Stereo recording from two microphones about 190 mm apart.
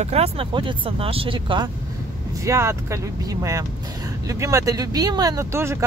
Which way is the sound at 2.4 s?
15° right (ahead or behind).